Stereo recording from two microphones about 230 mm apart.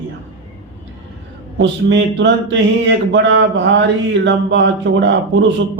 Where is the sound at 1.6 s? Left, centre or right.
Right.